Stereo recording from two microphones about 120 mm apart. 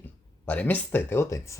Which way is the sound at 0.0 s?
15° left (ahead or behind).